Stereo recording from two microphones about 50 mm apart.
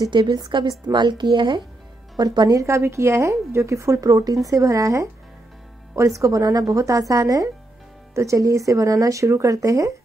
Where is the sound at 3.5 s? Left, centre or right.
Right.